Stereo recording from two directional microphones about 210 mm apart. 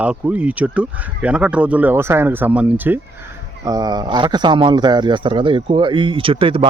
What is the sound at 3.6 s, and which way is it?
A man's voice, 20° right (ahead or behind).